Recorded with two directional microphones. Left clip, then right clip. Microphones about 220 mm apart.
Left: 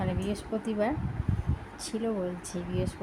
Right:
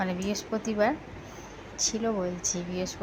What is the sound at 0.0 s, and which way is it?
Speech, 10° left (ahead or behind).